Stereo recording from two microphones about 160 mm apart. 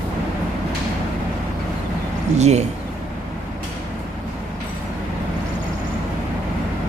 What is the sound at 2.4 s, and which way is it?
Speech, 45° right (ahead or behind).